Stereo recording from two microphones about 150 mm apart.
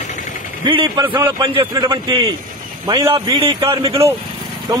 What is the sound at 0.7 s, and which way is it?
A man's voice, 35° right (ahead or behind).